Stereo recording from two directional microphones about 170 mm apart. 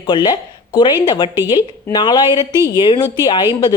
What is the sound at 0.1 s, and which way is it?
A woman's voice, 25° left (ahead or behind).